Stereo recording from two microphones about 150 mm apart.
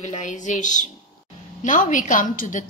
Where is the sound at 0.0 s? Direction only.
55° left (ahead or behind).